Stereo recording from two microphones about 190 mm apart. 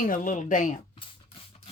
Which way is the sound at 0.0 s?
45° left (ahead or behind).